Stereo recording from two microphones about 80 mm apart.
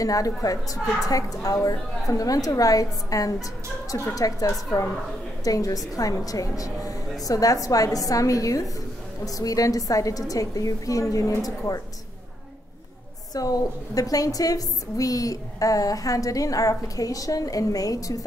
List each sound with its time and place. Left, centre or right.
0.0 s a woman's voice: left
13.3 s a woman's voice: left